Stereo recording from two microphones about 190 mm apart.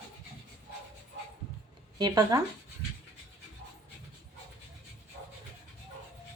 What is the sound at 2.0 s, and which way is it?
Speech, 20° right (ahead or behind).